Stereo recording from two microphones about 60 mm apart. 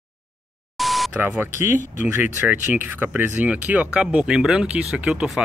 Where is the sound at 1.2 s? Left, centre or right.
Right.